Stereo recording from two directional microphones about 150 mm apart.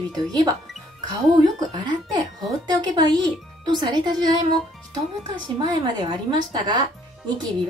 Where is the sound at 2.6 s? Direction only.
30° right (ahead or behind).